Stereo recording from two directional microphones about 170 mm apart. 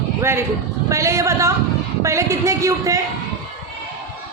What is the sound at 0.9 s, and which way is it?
A man's voice, 15° right (ahead or behind).